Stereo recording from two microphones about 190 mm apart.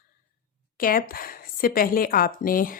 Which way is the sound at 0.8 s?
50° left (ahead or behind).